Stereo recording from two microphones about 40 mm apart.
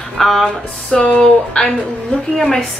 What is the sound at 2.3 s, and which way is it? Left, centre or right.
Speech, centre.